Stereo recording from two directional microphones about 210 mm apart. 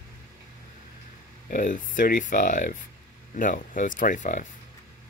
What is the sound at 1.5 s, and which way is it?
Speech, 40° left (ahead or behind).